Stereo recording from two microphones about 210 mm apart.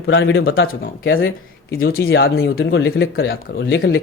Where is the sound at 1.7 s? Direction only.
45° left (ahead or behind).